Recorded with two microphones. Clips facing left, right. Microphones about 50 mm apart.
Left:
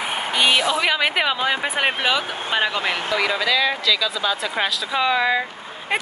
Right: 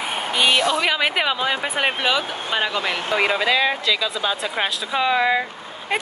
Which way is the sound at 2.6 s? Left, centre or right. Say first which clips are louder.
Left 1 dB; centre.